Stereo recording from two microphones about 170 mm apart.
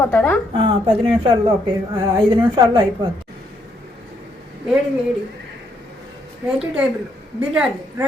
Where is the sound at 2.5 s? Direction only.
25° right (ahead or behind).